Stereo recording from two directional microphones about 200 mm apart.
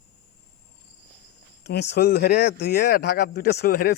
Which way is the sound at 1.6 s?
55° left (ahead or behind).